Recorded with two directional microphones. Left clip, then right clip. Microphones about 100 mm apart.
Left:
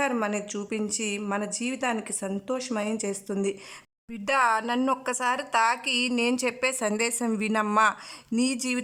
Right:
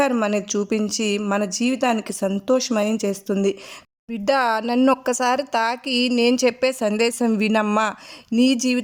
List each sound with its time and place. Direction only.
0.0 s a woman's voice: 30° right (ahead or behind)